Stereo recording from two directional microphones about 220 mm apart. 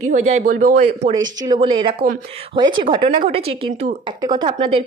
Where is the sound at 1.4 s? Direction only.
20° right (ahead or behind).